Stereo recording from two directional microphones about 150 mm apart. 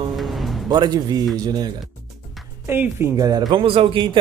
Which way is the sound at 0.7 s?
25° right (ahead or behind).